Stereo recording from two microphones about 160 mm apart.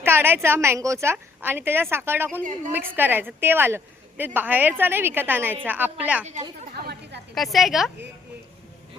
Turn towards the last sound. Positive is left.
turn(degrees=0)  # may be behind; listen again after turning